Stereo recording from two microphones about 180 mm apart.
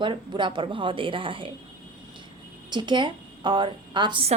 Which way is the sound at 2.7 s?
25° right (ahead or behind).